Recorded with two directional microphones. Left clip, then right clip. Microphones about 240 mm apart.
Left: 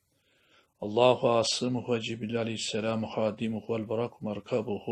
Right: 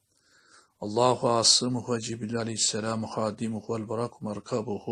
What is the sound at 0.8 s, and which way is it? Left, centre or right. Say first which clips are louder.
A man's voice: left 1 dB; centre.